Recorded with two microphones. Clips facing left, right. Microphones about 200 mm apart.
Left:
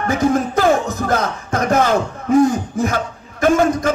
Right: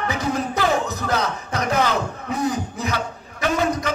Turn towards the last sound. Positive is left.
turn(degrees=50)  # may be behind; listen again after turning